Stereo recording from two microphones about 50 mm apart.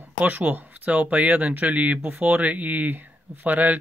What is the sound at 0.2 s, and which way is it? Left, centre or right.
Speech, right.